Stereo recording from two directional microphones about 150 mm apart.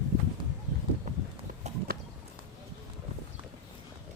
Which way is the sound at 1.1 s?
55° right (ahead or behind).